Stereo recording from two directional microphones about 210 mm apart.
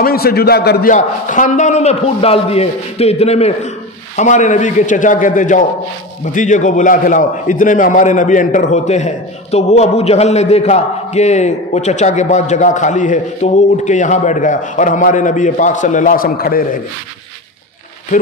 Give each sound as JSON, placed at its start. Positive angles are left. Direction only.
{"t": 0.0, "sound": "a man's voice", "side_deg": 45}
{"t": 0.9, "sound": "a man's voice", "side_deg": 35}